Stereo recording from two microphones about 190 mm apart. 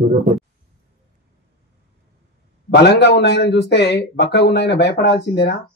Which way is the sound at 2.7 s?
60° left (ahead or behind).